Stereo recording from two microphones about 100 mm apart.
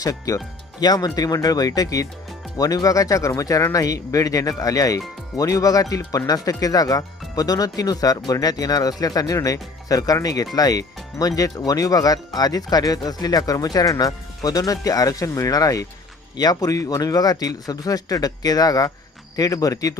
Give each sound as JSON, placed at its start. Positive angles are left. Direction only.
{"t": 0.0, "sound": "speech", "side_deg": 35}